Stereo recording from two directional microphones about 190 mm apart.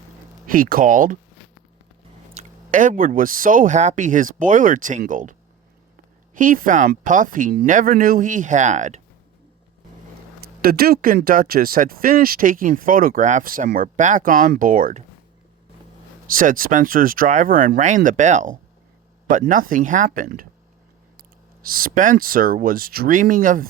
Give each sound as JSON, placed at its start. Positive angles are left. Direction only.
{"t": 0.4, "sound": "speech", "side_deg": -45}
{"t": 2.3, "sound": "speech", "side_deg": -40}
{"t": 10.6, "sound": "speech", "side_deg": -50}
{"t": 16.2, "sound": "speech", "side_deg": -45}